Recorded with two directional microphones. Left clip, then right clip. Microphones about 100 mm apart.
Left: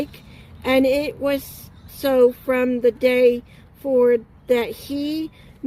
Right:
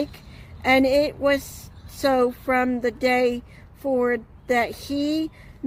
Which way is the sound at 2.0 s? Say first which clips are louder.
Left 4 dB; 35° right (ahead or behind).